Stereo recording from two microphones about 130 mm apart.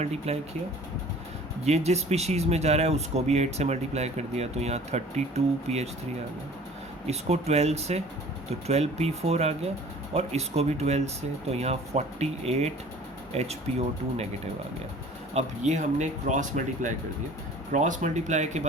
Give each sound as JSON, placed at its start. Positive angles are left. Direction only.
{"t": 0.0, "sound": "speech", "side_deg": -55}
{"t": 1.6, "sound": "speech", "side_deg": -55}
{"t": 7.1, "sound": "speech", "side_deg": -55}
{"t": 15.4, "sound": "speech", "side_deg": -65}